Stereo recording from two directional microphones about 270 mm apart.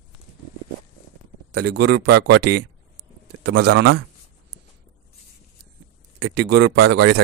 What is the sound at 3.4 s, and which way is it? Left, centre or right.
Speech, right.